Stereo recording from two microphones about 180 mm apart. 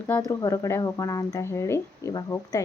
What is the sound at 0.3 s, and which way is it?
Speech, 15° left (ahead or behind).